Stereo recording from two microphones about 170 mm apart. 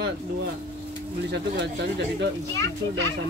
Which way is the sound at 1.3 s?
85° right.